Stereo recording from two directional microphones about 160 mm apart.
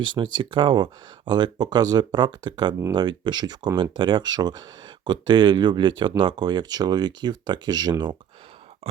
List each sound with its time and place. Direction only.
0.0 s speech: 30° right (ahead or behind)